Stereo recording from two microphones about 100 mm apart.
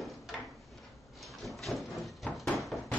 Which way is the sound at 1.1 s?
Centre (ahead or behind).